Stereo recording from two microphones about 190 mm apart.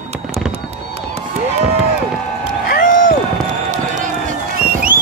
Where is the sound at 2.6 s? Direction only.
50° left (ahead or behind).